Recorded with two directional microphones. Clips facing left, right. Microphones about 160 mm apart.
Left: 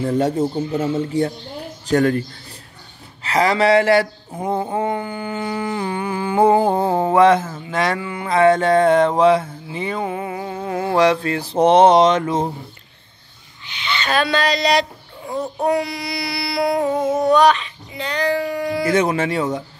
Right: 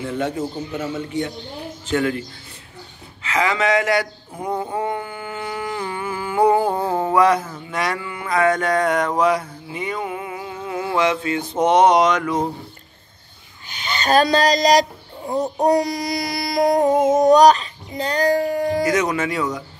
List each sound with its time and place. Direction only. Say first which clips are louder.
0.0 s a man's voice: left 5 dB; 35° left (ahead or behind)
3.3 s mantra: left 4 dB; 35° left (ahead or behind)
13.7 s speech: right 3 dB; 45° right (ahead or behind)
15.6 s a sound: right 2 dB; 40° right (ahead or behind)
18.9 s speech: left 2 dB; 30° left (ahead or behind)